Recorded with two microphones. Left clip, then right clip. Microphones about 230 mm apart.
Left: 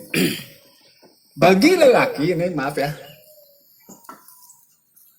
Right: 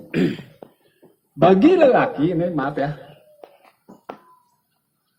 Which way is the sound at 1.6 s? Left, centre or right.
Left.